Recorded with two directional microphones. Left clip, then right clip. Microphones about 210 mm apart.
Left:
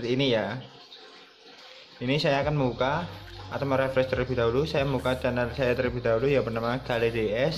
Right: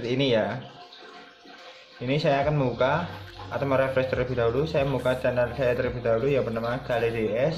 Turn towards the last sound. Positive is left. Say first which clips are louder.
# right 1 dB
turn(degrees=25)  # may be behind; listen again after turning